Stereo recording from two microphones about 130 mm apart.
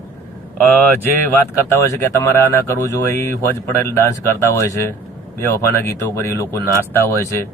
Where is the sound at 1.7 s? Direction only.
20° left (ahead or behind).